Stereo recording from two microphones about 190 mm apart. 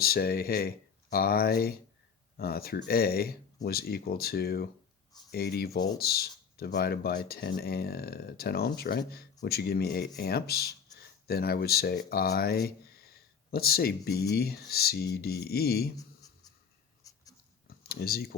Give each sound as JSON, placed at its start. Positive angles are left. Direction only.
{"t": 0.0, "sound": "speech", "side_deg": 55}
{"t": 16.0, "sound": "writing", "side_deg": 20}
{"t": 17.8, "sound": "speech", "side_deg": 55}